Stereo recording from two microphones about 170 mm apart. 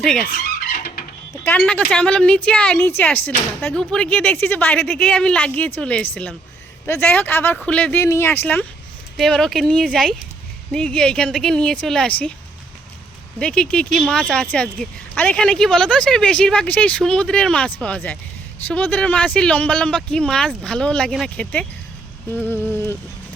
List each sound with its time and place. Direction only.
0.0 s a woman's voice: 5° left (ahead or behind)
0.3 s vehicle: 55° left (ahead or behind)
1.5 s a woman's voice: 10° left (ahead or behind)
13.4 s a woman's voice: 5° left (ahead or behind)
22.4 s a sound: 10° right (ahead or behind)